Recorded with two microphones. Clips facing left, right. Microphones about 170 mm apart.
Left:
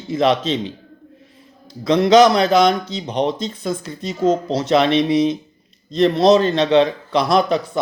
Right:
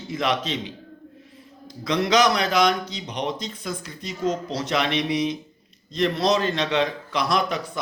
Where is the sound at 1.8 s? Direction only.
25° left (ahead or behind).